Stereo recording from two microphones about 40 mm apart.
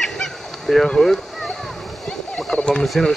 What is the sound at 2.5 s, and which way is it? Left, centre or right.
Turkey, left.